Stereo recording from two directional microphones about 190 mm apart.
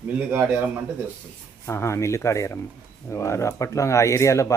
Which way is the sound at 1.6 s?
15° left (ahead or behind).